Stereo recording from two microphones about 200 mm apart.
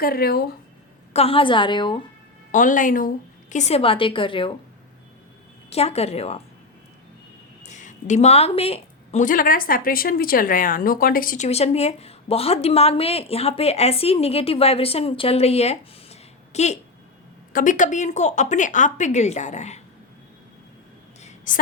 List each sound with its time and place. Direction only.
0.0 s speech: 50° left (ahead or behind)
1.1 s a woman's voice: 30° left (ahead or behind)
2.5 s a woman's voice: 40° left (ahead or behind); by 4.5 s 25° left (ahead or behind)
5.7 s speech: 30° left (ahead or behind)
7.6 s a sound: 35° left (ahead or behind)
9.2 s speech: 45° left (ahead or behind)
21.2 s a sound: 35° left (ahead or behind)